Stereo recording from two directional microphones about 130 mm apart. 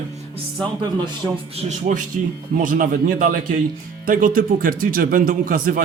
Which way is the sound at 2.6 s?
90° right.